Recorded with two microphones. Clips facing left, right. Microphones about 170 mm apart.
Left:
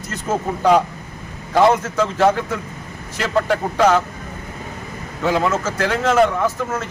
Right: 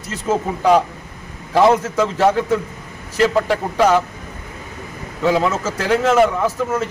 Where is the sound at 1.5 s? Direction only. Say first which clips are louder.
Right 1 dB; centre (ahead or behind).